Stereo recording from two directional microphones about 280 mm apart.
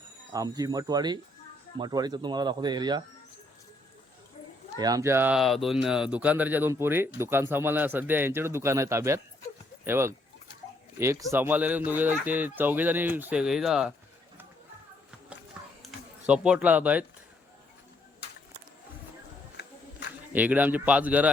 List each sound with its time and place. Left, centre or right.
0.3 s speech: centre
4.8 s speech: centre
15.8 s speech: centre
19.6 s a sound: left
20.3 s speech: centre